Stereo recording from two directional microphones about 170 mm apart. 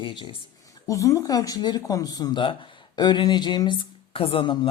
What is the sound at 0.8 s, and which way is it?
Speech, 20° left (ahead or behind).